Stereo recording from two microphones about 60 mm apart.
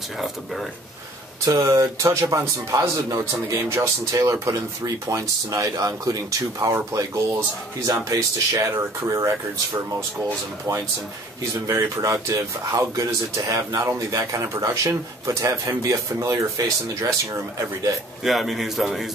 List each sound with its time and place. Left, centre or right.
1.4 s speech: right
3.5 s speech: right
11.6 s speech: right
18.2 s a man's voice: centre